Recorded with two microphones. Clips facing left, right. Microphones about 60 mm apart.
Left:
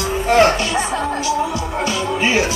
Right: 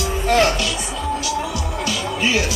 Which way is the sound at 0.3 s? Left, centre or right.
Left.